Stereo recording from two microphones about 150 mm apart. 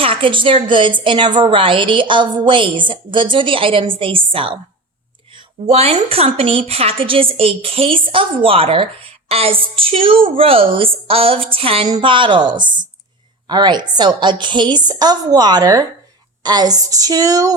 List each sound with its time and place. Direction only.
0.0 s a woman's voice: 35° right (ahead or behind)